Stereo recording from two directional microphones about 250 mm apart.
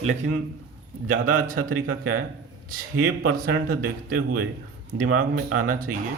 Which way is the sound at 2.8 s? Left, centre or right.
Right.